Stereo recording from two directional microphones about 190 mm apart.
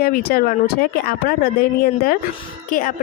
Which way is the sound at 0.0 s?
50° left (ahead or behind).